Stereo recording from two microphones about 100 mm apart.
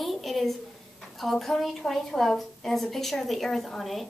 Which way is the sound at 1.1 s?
Centre (ahead or behind).